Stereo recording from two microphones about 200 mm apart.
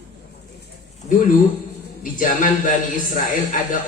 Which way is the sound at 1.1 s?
40° left (ahead or behind).